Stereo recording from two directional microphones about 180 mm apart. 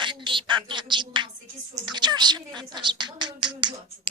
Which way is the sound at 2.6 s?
25° right (ahead or behind).